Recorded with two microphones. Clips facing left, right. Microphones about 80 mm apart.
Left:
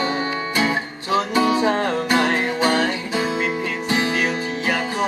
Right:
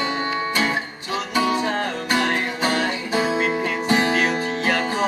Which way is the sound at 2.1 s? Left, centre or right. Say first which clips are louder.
Left 2 dB; left.